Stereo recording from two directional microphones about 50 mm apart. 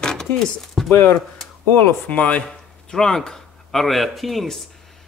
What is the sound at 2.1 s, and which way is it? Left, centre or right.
Speech, left.